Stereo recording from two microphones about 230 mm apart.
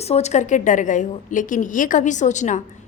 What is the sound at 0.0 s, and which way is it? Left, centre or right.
A woman's voice, left.